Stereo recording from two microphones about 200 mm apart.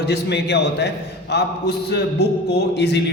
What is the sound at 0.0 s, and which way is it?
A man's voice, 55° left (ahead or behind).